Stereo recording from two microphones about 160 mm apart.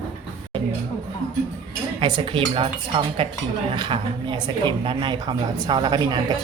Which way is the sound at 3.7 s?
30° right (ahead or behind).